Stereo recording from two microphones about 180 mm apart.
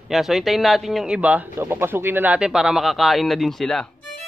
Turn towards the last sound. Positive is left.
turn(degrees=0)  # may be behind; listen again after turning